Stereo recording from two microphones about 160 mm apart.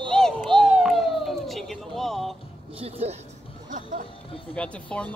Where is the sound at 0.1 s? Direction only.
5° left (ahead or behind).